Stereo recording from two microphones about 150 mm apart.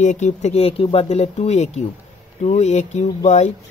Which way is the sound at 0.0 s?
50° left (ahead or behind).